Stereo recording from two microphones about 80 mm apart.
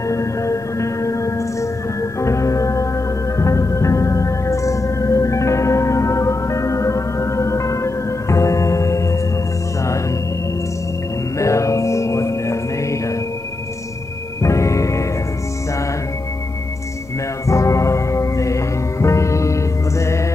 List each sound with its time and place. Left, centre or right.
0.1 s music: left
11.3 s music: left
14.4 s music: left
17.5 s music: left